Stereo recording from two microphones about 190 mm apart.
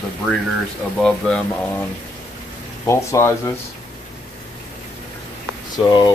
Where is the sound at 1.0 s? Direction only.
5° left (ahead or behind).